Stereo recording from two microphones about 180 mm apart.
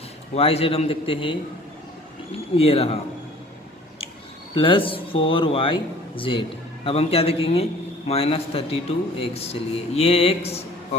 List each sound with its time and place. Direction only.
0.3 s a man's voice: 30° left (ahead or behind)
2.6 s a man's voice: 35° left (ahead or behind)
4.5 s a man's voice: 30° left (ahead or behind)